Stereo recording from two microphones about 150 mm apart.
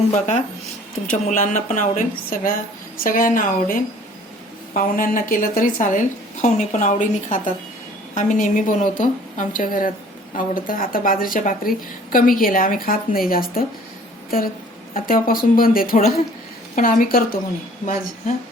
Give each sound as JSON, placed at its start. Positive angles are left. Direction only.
{"t": 1.1, "sound": "a woman's voice", "side_deg": 60}
{"t": 5.8, "sound": "a woman's voice", "side_deg": 55}